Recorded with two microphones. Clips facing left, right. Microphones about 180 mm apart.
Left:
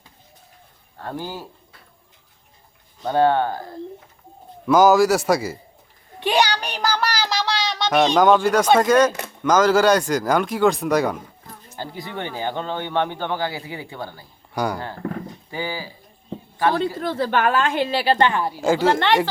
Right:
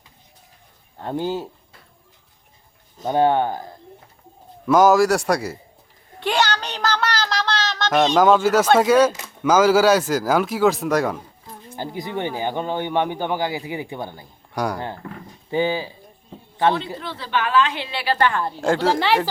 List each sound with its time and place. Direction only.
0.9 s speech: 20° right (ahead or behind)
3.0 s speech: 15° right (ahead or behind)
4.6 s speech: centre (ahead or behind)
6.1 s child singing: 15° left (ahead or behind)
8.1 s speech: centre (ahead or behind)
11.8 s speech: 15° right (ahead or behind)
14.5 s speech: centre (ahead or behind)
15.4 s speech: 20° right (ahead or behind)
17.0 s a woman's voice: 50° left (ahead or behind)
18.0 s a woman's voice: 25° left (ahead or behind)
18.5 s speech: 5° left (ahead or behind)